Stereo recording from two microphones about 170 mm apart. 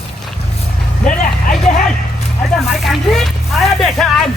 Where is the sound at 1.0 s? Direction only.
50° left (ahead or behind).